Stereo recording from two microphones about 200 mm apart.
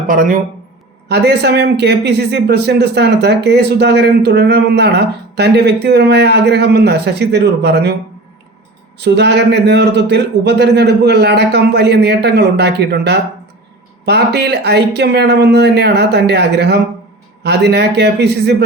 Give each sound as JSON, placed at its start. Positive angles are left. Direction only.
{"t": 0.1, "sound": "speech", "side_deg": -45}
{"t": 1.0, "sound": "speech", "side_deg": -55}
{"t": 9.0, "sound": "speech", "side_deg": -60}